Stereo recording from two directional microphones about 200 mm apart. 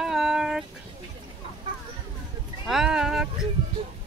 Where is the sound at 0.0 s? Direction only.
Centre (ahead or behind).